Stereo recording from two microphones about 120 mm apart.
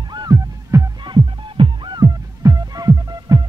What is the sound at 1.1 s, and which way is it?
Music, 40° right (ahead or behind).